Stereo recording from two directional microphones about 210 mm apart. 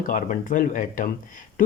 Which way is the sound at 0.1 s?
40° left (ahead or behind).